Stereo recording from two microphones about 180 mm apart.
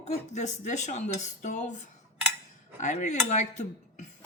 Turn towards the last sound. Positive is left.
turn(degrees=40)  # may be behind; listen again after turning